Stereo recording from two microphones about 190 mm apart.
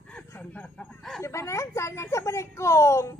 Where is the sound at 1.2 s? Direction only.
15° left (ahead or behind).